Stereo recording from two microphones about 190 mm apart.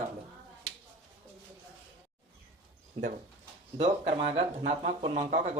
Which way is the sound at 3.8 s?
30° right (ahead or behind).